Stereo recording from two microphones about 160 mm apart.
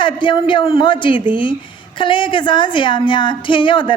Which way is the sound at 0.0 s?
30° left (ahead or behind).